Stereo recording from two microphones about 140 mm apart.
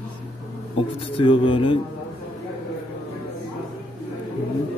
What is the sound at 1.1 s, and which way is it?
Speech, 40° left (ahead or behind).